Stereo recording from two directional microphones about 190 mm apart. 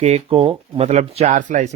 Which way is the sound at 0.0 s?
30° right (ahead or behind).